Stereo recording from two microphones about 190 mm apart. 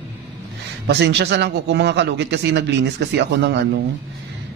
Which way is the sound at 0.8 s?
65° right (ahead or behind).